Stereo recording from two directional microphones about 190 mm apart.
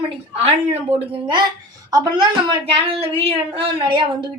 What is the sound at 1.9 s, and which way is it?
A woman's voice, 20° right (ahead or behind).